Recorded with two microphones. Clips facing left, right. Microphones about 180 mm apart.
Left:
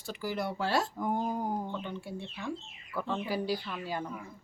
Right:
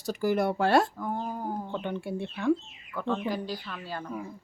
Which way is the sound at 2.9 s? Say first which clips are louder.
Right 3 dB; 5° left (ahead or behind).